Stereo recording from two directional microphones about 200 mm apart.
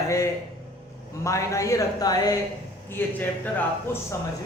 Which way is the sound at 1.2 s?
15° left (ahead or behind).